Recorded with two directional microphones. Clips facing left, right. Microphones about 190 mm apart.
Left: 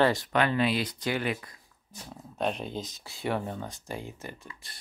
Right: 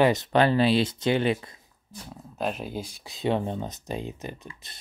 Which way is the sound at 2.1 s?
Centre (ahead or behind).